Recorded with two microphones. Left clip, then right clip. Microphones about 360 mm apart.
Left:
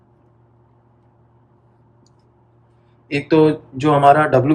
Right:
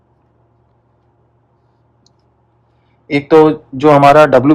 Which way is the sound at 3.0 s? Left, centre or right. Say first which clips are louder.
Right 6 dB; centre.